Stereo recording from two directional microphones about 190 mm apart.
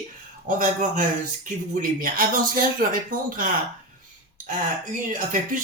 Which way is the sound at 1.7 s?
45° right (ahead or behind).